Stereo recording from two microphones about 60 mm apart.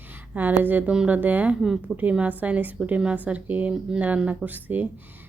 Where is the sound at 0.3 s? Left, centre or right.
Right.